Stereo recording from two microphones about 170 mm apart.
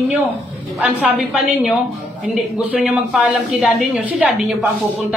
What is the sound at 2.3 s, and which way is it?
A woman's voice, 5° right (ahead or behind).